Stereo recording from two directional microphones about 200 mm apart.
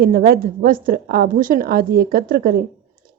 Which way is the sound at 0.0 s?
50° right (ahead or behind).